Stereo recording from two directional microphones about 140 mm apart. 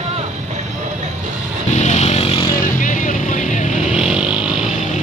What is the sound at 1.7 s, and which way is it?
Motorcycle, 55° left (ahead or behind).